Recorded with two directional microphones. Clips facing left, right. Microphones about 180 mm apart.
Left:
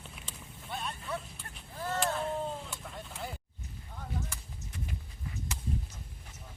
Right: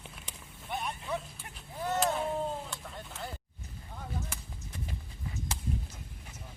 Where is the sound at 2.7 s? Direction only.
Centre (ahead or behind).